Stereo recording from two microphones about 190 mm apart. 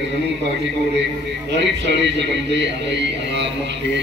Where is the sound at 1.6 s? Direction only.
65° right (ahead or behind).